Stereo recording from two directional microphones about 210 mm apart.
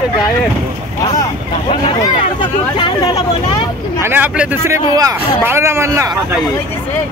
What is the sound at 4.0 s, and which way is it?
Speech, 10° right (ahead or behind).